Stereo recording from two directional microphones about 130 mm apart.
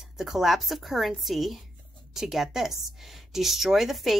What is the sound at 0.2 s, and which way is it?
A woman's voice, centre (ahead or behind).